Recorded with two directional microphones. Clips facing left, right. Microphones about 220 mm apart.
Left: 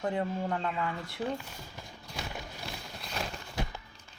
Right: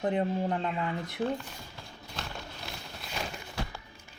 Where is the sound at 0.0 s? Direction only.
20° right (ahead or behind).